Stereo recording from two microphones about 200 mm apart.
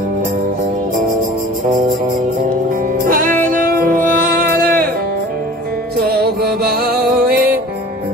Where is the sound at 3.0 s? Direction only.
45° right (ahead or behind).